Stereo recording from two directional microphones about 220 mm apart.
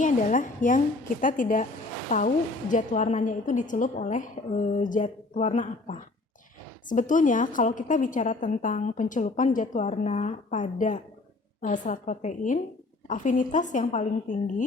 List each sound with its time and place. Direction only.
0.0 s a woman's voice: 35° left (ahead or behind)